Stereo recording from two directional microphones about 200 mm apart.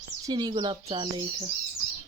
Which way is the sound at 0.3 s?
20° right (ahead or behind).